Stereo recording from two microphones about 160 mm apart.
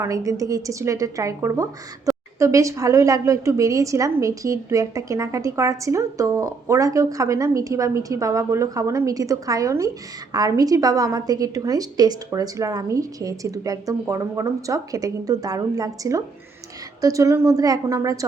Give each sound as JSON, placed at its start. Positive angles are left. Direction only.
{"t": 0.0, "sound": "a woman's voice", "side_deg": -20}